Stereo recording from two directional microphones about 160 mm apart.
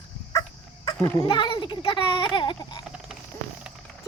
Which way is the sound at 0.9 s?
20° left (ahead or behind).